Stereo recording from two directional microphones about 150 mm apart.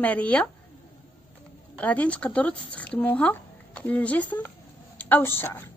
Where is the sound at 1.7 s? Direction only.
10° left (ahead or behind).